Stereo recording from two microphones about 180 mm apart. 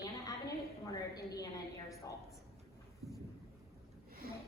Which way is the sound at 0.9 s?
20° left (ahead or behind).